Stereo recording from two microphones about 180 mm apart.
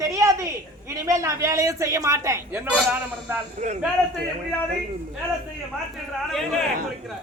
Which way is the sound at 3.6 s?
40° right (ahead or behind).